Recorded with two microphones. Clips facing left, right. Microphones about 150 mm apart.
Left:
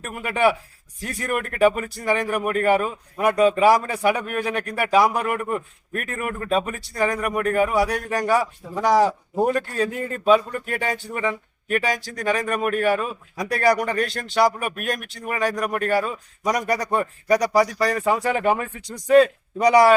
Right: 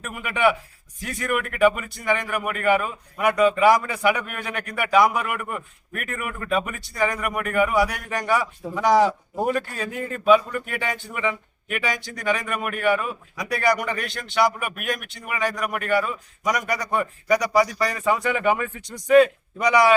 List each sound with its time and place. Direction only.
0.0 s a man's voice: 35° left (ahead or behind)